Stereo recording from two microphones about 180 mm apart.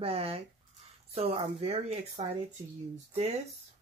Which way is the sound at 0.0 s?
35° right (ahead or behind).